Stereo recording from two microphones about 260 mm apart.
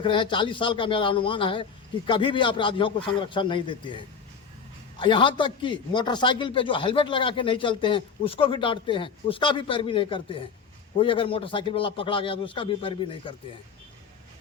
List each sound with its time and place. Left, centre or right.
0.0 s a man's voice: centre